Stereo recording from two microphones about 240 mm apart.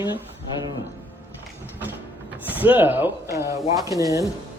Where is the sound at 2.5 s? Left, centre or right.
Centre.